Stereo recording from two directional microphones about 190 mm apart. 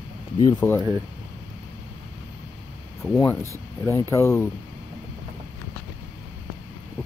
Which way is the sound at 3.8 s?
15° left (ahead or behind).